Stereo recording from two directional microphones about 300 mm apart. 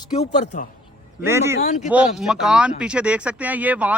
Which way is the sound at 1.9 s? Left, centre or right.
Centre.